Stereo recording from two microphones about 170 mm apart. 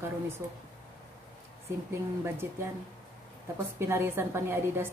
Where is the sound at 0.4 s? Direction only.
15° right (ahead or behind).